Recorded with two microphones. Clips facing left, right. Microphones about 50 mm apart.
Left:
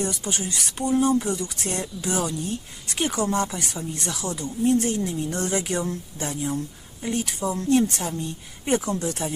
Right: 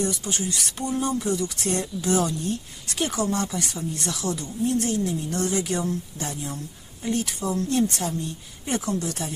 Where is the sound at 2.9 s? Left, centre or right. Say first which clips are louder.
Left 1 dB; left.